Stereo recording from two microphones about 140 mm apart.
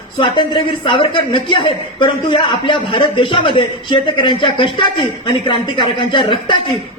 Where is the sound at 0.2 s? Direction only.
35° left (ahead or behind).